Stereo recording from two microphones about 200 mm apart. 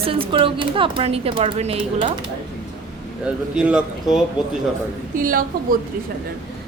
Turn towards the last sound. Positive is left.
turn(degrees=-45)  # may be behind; listen again after turning